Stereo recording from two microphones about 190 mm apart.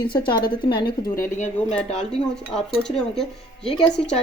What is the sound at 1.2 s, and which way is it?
Speech, 40° left (ahead or behind).